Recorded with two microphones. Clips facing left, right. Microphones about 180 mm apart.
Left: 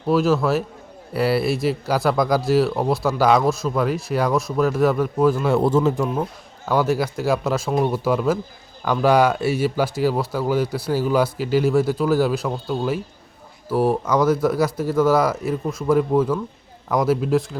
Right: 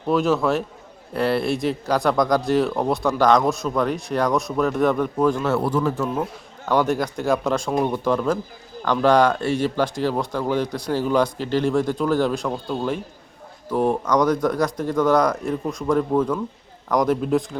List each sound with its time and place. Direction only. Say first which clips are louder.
0.0 s speech: left 1 dB; centre (ahead or behind)
5.5 s speech: left 4 dB; 20° left (ahead or behind)
6.7 s speech: even; 5° left (ahead or behind)